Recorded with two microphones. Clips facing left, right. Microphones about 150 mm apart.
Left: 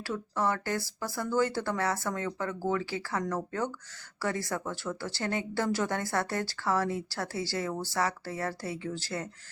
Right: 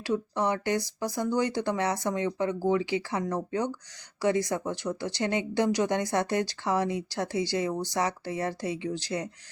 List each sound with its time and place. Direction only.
0.0 s speech: 20° right (ahead or behind)